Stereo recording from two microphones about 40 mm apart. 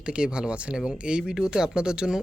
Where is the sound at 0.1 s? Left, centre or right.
Right.